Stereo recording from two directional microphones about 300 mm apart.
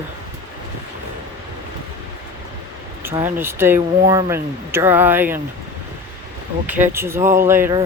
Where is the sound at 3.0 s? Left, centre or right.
Centre.